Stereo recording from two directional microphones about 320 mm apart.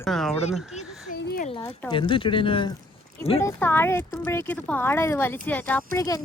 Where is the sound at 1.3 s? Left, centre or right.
Left.